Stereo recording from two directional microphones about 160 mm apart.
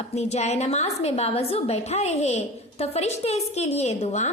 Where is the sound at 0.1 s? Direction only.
45° left (ahead or behind).